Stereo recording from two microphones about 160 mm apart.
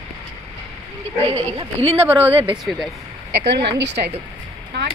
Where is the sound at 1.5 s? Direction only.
40° right (ahead or behind).